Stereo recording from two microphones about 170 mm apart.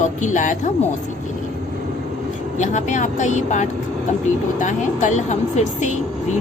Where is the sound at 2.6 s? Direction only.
45° left (ahead or behind).